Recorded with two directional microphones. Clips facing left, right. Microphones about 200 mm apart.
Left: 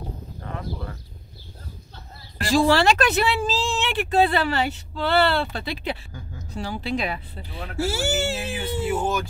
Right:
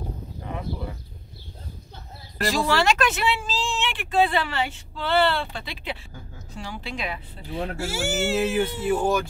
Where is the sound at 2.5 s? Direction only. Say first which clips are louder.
Left 5 dB; 30° left (ahead or behind).